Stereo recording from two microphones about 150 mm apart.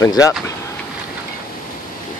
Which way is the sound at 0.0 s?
25° left (ahead or behind).